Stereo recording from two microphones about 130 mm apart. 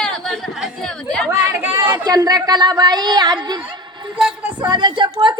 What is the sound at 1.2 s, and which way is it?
Speech, 20° right (ahead or behind).